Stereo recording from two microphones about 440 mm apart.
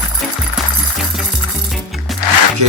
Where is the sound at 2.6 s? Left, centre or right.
Right.